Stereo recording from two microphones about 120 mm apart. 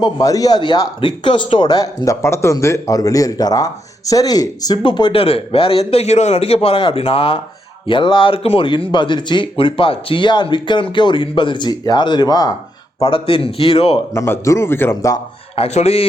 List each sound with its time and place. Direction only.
0.0 s speech: 30° left (ahead or behind)
4.8 s speech: 45° left (ahead or behind)
13.0 s speech: 45° left (ahead or behind)
14.1 s a man's voice: 25° left (ahead or behind)
15.5 s speech: 60° left (ahead or behind)